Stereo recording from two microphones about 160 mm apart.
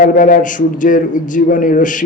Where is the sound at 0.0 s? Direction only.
60° left (ahead or behind).